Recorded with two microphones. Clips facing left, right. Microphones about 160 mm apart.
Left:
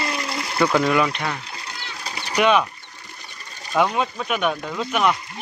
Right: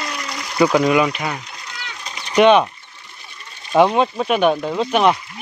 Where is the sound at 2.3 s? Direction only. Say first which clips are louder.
Right 6 dB; 30° right (ahead or behind).